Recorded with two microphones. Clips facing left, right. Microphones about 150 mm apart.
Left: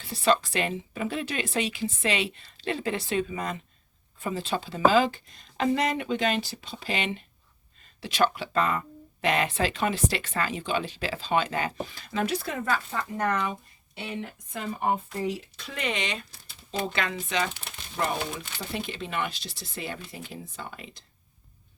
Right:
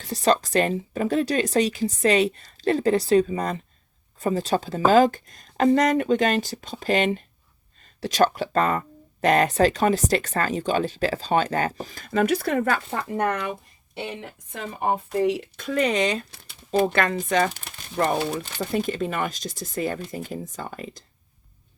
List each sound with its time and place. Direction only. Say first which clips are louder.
0.0 s speech: right 3 dB; 40° right (ahead or behind); by 13.6 s 65° right (ahead or behind)
15.2 s speech: right 8 dB; 65° right (ahead or behind); by 16.2 s 40° right (ahead or behind)
16.7 s speech: right 9 dB; 50° right (ahead or behind)